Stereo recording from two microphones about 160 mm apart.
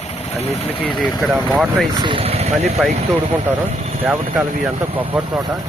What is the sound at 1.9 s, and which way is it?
Speech, 30° right (ahead or behind).